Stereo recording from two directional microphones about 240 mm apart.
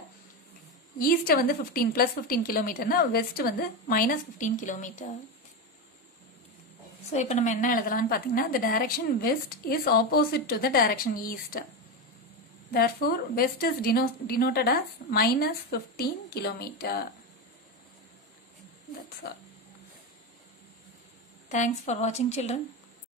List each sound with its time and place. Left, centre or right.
0.9 s a woman's voice: left
7.1 s a woman's voice: left
12.7 s a woman's voice: left
21.5 s a woman's voice: left